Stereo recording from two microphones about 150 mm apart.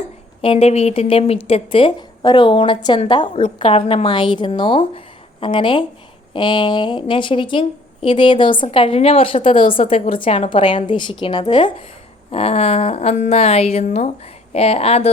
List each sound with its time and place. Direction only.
0.4 s a woman's voice: 40° left (ahead or behind)